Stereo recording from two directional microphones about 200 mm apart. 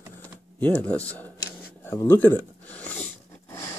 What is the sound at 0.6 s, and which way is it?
Speech, 10° left (ahead or behind).